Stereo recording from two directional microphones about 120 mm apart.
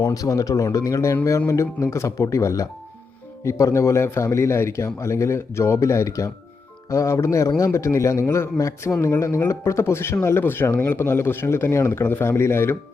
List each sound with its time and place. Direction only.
0.0 s a man's voice: 30° left (ahead or behind)